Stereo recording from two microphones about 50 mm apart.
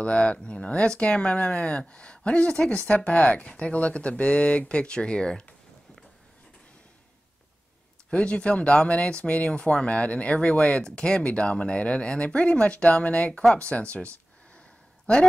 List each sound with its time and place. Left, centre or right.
0.0 s speech: left
8.1 s speech: left